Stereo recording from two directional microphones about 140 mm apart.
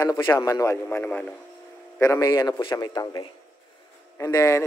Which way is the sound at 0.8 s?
10° left (ahead or behind).